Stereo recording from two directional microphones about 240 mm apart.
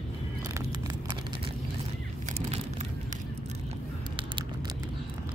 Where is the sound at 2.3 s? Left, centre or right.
Right.